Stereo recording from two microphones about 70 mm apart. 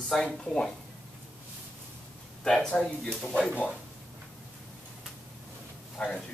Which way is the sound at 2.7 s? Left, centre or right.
Left.